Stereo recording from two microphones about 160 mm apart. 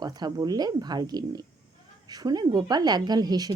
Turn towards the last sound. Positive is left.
turn(degrees=-25)  # may be behind; listen again after turning